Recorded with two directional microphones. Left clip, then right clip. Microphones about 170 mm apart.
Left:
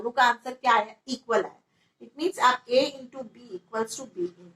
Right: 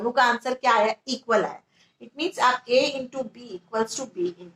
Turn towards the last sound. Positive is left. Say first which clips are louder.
# right 5 dB
turn(degrees=-35)  # may be behind; listen again after turning